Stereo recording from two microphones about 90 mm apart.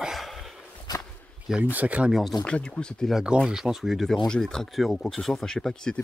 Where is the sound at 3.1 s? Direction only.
10° right (ahead or behind); by 6.0 s 10° left (ahead or behind).